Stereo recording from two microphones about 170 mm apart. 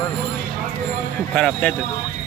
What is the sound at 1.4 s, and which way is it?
Speech, 5° left (ahead or behind).